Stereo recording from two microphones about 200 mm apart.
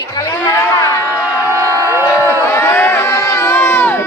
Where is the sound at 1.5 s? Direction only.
15° right (ahead or behind).